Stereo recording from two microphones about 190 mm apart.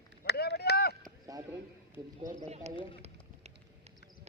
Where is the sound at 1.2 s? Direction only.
15° right (ahead or behind).